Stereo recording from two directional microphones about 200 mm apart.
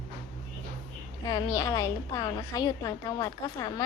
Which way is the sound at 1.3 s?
20° left (ahead or behind).